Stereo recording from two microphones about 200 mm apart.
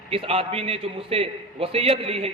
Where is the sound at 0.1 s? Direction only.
25° right (ahead or behind).